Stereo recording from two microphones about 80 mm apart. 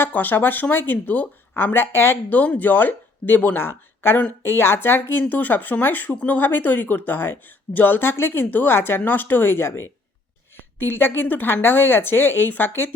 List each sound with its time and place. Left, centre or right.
0.0 s speech: left